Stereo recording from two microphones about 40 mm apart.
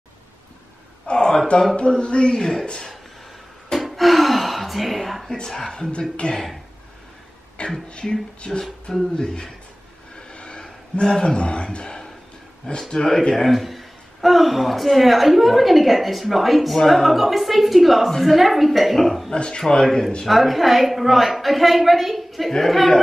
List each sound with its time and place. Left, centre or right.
1.0 s a sound: centre
1.8 s speech: left
3.8 s gasp: centre
5.3 s a man's voice: centre
6.2 s speech: left
7.6 s speech: left
10.1 s a sound: left
12.9 s a man's voice: centre
19.3 s a man's voice: left
20.2 s a man's voice: centre